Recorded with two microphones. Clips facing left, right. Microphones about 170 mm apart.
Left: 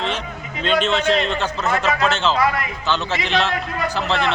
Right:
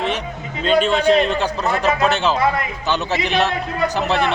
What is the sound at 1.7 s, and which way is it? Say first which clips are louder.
A man's voice: right 2 dB; 15° right (ahead or behind).